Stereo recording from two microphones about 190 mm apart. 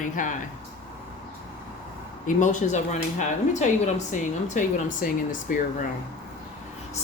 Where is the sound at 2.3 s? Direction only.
40° left (ahead or behind).